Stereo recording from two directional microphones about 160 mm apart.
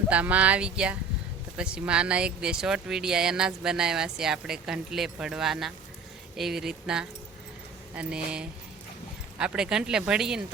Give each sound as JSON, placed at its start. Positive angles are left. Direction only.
{"t": 0.1, "sound": "speech", "side_deg": -10}